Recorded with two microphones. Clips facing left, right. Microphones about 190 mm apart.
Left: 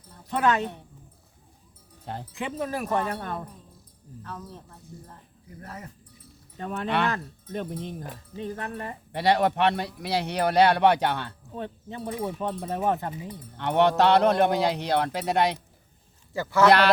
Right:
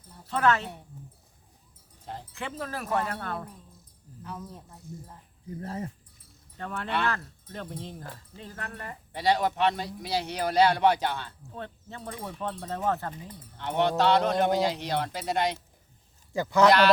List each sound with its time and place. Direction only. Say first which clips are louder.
0.3 s speech: left 1 dB; 15° left (ahead or behind)
2.3 s speech: left 5 dB; 15° left (ahead or behind)
4.2 s speech: even; 10° right (ahead or behind)
5.5 s speech: right 6 dB; 30° right (ahead or behind)
6.6 s speech: left 4 dB; 20° left (ahead or behind)
9.1 s a man's voice: left 3 dB; 65° left (ahead or behind)
11.5 s speech: left 5 dB; 15° left (ahead or behind)
13.6 s a man's voice: left 4 dB; 65° left (ahead or behind)
16.3 s speech: even; 15° right (ahead or behind)